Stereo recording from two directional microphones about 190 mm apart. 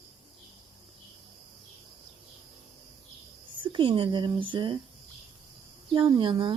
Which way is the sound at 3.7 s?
25° right (ahead or behind).